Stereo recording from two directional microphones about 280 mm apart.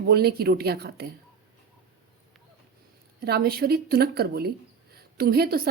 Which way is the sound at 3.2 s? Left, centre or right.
Right.